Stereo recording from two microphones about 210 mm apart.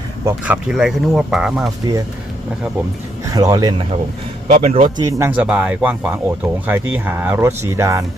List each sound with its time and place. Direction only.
0.3 s speech: 10° right (ahead or behind)
3.3 s speech: 20° right (ahead or behind)
4.4 s speech: 30° right (ahead or behind); by 8.0 s 15° right (ahead or behind)